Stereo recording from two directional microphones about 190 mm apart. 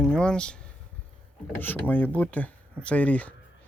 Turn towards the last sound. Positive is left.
turn(degrees=5)  # may be behind; listen again after turning